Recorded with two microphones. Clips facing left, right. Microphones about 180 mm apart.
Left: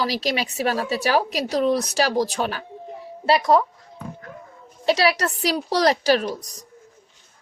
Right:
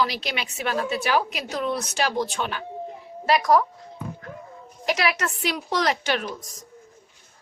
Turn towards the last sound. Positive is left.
turn(degrees=35)  # may be behind; listen again after turning